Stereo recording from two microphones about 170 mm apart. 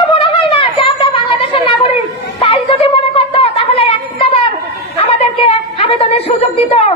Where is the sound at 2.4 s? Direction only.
35° left (ahead or behind).